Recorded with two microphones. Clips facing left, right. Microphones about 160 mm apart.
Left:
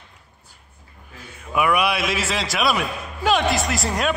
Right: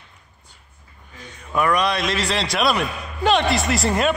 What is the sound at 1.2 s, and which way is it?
A man's voice, 10° left (ahead or behind).